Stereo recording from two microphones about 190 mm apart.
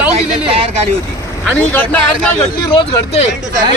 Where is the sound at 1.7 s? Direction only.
10° left (ahead or behind).